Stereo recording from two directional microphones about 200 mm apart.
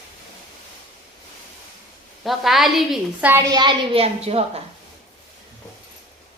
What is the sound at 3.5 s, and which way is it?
A woman's voice, 25° right (ahead or behind).